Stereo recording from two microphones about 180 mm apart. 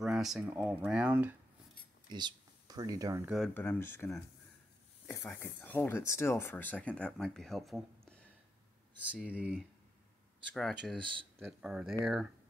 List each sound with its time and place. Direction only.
0.0 s speech: centre (ahead or behind)
2.0 s speech: 25° right (ahead or behind)
3.3 s speech: centre (ahead or behind)
3.5 s speech: 15° left (ahead or behind)
9.0 s speech: 10° right (ahead or behind)